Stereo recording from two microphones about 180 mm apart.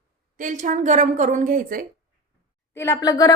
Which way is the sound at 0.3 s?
45° right (ahead or behind).